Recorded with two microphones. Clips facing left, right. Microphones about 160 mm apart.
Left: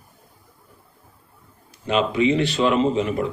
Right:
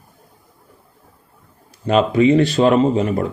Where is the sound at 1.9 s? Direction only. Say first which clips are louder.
Right 6 dB; 45° right (ahead or behind).